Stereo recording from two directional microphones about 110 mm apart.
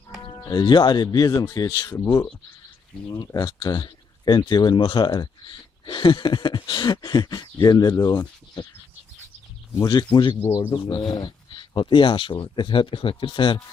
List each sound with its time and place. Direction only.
0.4 s speech: 45° left (ahead or behind)
3.1 s speech: 40° left (ahead or behind)
9.7 s speech: 40° left (ahead or behind)